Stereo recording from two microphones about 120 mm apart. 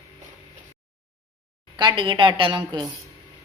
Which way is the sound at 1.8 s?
40° right (ahead or behind).